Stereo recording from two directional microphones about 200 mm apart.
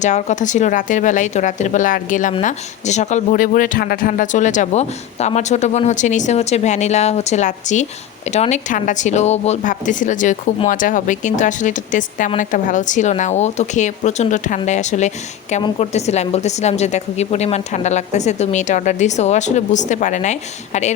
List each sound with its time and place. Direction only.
0.0 s speech: 35° left (ahead or behind)